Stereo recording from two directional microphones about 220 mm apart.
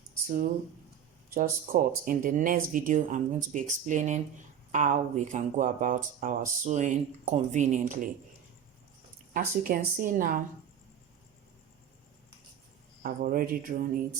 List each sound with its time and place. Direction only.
1.3 s speech: 40° right (ahead or behind)
9.3 s speech: 40° right (ahead or behind)
13.0 s speech: 40° right (ahead or behind)